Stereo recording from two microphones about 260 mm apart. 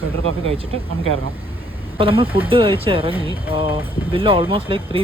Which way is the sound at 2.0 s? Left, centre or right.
Right.